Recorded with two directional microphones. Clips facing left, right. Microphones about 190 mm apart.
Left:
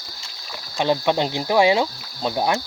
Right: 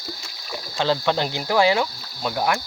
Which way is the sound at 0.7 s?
15° left (ahead or behind).